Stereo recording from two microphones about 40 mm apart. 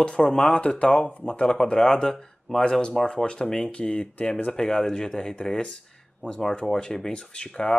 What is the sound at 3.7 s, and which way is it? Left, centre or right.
Speech, left.